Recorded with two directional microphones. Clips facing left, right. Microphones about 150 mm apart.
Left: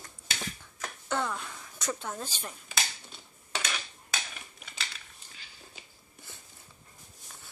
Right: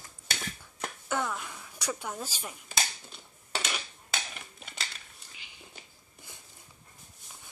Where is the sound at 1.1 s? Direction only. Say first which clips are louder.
Left 1 dB; 10° right (ahead or behind).